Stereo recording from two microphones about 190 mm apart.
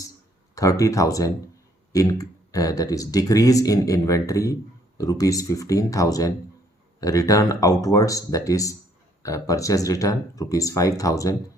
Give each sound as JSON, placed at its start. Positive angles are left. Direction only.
{"t": 0.5, "sound": "speech", "side_deg": 15}